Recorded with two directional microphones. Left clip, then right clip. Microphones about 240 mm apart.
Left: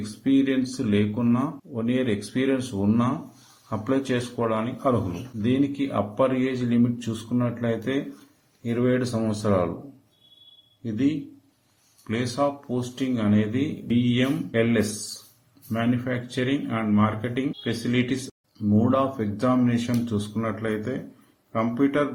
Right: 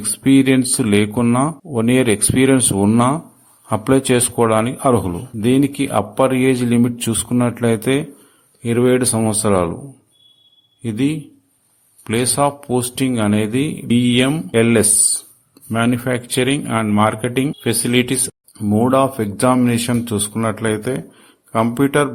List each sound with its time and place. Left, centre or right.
0.3 s speech: right
12.0 s speech: right